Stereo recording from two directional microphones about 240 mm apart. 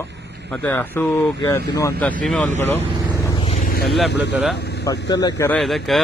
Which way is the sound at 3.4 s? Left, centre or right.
Left.